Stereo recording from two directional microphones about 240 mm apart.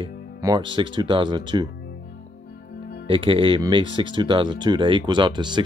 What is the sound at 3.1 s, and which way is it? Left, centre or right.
Speech, right.